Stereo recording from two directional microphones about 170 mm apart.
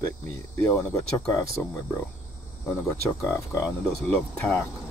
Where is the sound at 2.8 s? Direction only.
15° left (ahead or behind).